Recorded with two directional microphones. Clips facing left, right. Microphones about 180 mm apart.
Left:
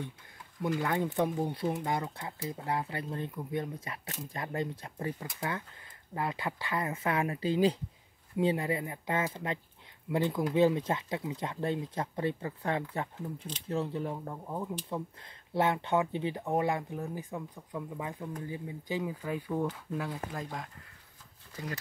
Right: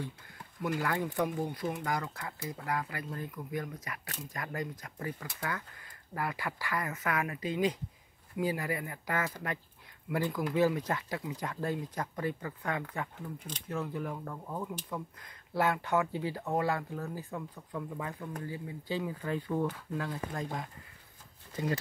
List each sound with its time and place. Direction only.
0.6 s speech: 20° left (ahead or behind)